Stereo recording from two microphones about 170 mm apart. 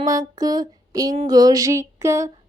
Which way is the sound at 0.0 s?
20° right (ahead or behind).